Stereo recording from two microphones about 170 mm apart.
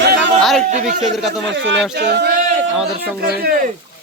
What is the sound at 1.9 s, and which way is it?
Speech, 75° right (ahead or behind).